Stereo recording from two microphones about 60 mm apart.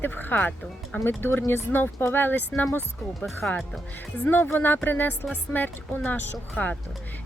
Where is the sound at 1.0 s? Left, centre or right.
Left.